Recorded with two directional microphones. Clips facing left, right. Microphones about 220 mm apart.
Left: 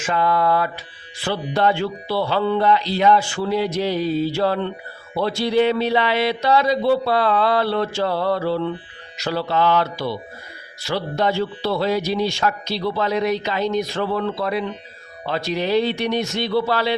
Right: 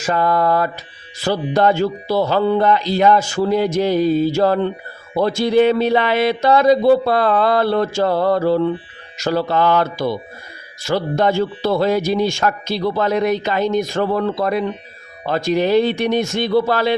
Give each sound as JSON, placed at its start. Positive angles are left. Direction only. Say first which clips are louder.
{"t": 0.0, "sound": "a man's voice", "louder": "right 3 dB", "side_deg": -40}